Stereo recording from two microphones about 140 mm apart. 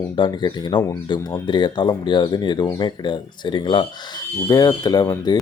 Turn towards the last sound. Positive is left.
turn(degrees=30)  # may be behind; listen again after turning